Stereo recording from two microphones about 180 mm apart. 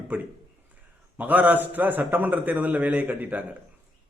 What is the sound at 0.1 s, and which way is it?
A man's voice, 10° right (ahead or behind).